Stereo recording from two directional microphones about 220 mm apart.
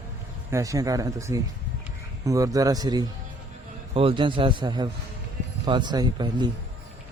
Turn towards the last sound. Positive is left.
turn(degrees=-20)  # may be behind; listen again after turning